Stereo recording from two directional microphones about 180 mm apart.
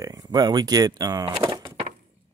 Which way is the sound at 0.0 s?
20° right (ahead or behind).